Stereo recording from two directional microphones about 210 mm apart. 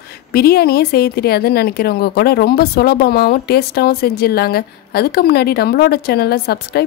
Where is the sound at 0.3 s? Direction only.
50° left (ahead or behind).